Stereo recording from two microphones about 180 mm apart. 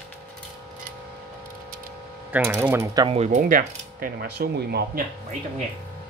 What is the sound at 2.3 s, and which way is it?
Speech, 10° right (ahead or behind).